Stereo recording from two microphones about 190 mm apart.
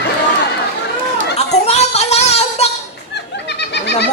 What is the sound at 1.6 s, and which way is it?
Music, 35° left (ahead or behind).